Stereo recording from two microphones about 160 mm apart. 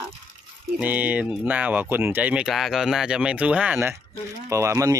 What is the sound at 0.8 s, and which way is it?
Speech, 10° right (ahead or behind).